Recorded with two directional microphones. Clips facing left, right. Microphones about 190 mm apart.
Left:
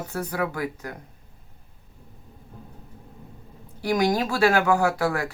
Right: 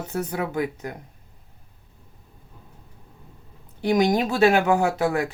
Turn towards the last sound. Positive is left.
turn(degrees=-20)  # may be behind; listen again after turning